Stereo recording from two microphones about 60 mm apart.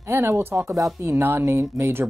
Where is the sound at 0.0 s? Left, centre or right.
Right.